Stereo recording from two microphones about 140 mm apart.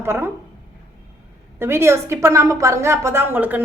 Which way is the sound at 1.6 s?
20° right (ahead or behind).